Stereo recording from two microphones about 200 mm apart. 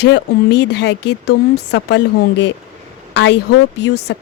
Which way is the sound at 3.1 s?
60° left (ahead or behind).